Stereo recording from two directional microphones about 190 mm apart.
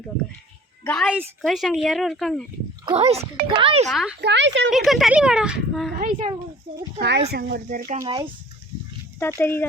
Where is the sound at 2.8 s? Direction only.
35° right (ahead or behind).